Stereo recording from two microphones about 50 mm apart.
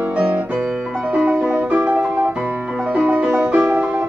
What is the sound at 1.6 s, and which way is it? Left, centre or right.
Music, right.